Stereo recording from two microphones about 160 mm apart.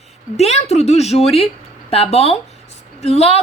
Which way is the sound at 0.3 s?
45° left (ahead or behind).